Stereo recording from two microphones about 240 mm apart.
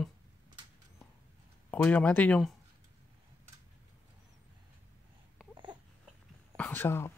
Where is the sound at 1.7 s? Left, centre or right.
Centre.